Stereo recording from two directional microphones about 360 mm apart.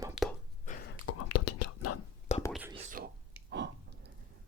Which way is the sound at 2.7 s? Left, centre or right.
Right.